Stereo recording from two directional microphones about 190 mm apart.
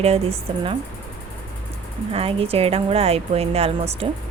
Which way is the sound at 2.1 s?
30° right (ahead or behind).